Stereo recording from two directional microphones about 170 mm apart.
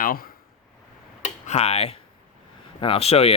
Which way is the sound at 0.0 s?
60° left (ahead or behind).